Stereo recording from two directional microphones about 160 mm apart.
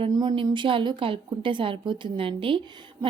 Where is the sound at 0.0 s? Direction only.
25° right (ahead or behind).